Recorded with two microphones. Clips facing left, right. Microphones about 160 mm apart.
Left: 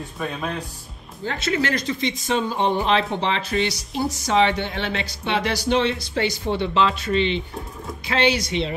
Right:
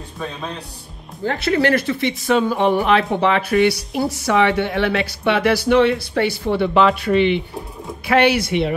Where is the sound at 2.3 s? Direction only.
65° right (ahead or behind).